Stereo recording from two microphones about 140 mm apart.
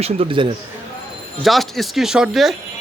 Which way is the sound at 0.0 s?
40° right (ahead or behind).